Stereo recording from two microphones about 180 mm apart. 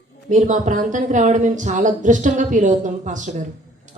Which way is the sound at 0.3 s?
45° right (ahead or behind).